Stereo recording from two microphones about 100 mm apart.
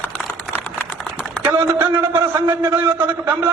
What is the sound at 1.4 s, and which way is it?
A man's voice, 25° right (ahead or behind).